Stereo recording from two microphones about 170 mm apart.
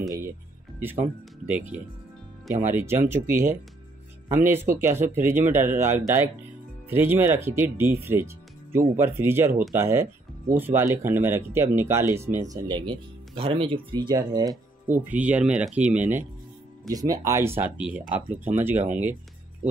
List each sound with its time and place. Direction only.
0.7 s speech: 10° right (ahead or behind)
14.9 s speech: 10° right (ahead or behind)